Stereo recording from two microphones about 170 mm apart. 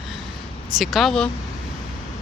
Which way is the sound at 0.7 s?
Centre (ahead or behind).